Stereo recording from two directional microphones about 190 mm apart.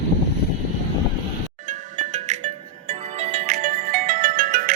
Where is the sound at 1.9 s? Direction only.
40° right (ahead or behind).